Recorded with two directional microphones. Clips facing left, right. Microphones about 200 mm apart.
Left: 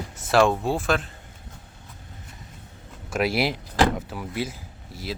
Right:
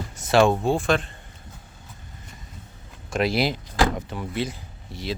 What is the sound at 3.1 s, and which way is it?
Speech, 5° left (ahead or behind).